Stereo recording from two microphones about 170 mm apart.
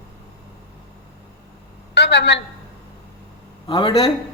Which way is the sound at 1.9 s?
85° left.